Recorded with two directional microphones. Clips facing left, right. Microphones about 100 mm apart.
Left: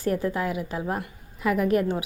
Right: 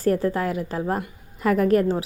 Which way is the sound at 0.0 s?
40° right (ahead or behind).